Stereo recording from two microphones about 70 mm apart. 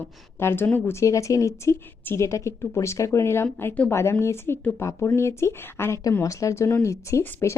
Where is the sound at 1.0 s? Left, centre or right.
Left.